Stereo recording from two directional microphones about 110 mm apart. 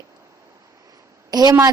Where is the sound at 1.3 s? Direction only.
35° right (ahead or behind).